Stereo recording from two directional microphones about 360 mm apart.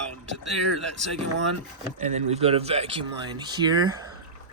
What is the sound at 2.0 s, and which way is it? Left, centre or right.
Speech, centre.